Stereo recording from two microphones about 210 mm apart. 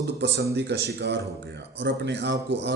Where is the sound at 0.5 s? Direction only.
55° right (ahead or behind).